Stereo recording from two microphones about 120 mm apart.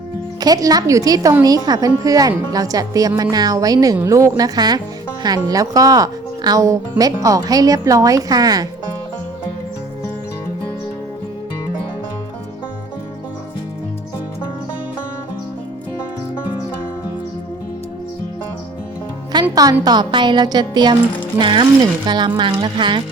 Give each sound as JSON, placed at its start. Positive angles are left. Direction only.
{"t": 0.3, "sound": "speech", "side_deg": -35}
{"t": 19.3, "sound": "music", "side_deg": -35}
{"t": 19.8, "sound": "speech", "side_deg": -35}